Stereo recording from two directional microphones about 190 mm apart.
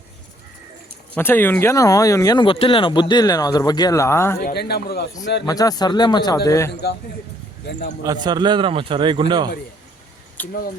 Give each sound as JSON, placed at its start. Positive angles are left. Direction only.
{"t": 1.1, "sound": "speech", "side_deg": 10}
{"t": 4.4, "sound": "a man's voice", "side_deg": 55}
{"t": 5.5, "sound": "speech", "side_deg": 20}
{"t": 7.7, "sound": "speech", "side_deg": 70}
{"t": 8.0, "sound": "a man's voice", "side_deg": -20}
{"t": 10.4, "sound": "speech", "side_deg": 10}